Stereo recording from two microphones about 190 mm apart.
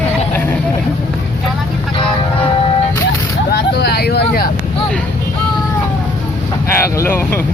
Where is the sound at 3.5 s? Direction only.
55° left (ahead or behind).